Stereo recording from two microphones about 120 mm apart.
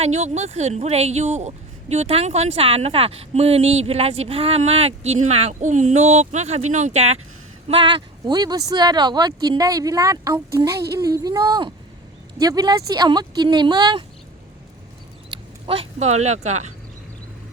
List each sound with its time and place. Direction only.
0.0 s speech: 65° right (ahead or behind)
7.7 s speech: 45° right (ahead or behind)
15.3 s speech: 50° right (ahead or behind); by 16.6 s 70° right (ahead or behind)